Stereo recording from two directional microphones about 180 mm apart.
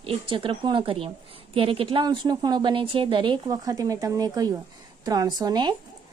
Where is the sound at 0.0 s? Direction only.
30° right (ahead or behind).